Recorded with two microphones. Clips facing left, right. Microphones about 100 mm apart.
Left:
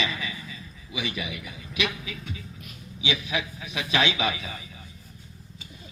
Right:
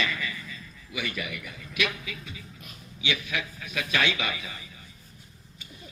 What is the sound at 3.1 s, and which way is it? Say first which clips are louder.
A man's voice: left 2 dB; 20° left (ahead or behind).